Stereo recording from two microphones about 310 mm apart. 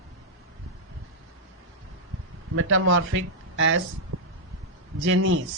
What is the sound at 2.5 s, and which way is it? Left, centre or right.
Speech, right.